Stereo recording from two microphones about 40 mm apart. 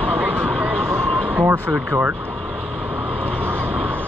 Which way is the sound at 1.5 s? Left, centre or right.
Right.